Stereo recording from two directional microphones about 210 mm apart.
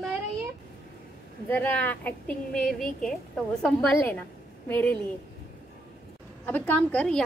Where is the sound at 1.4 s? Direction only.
10° left (ahead or behind).